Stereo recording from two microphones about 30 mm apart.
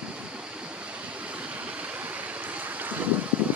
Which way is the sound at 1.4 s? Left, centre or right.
Right.